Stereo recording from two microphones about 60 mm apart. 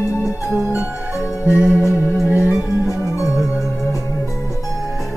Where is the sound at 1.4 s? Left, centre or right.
Right.